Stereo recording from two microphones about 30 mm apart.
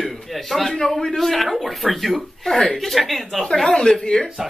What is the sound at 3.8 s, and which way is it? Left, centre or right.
Speech, left.